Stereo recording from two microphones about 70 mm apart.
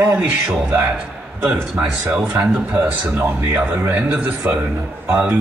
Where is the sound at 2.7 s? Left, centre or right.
Right.